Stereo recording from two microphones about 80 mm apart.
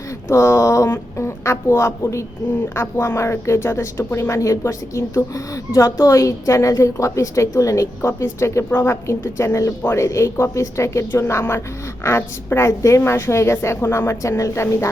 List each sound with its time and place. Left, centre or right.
0.3 s speech: left